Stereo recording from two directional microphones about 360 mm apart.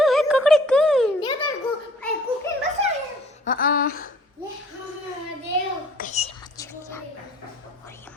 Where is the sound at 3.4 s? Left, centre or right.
Left.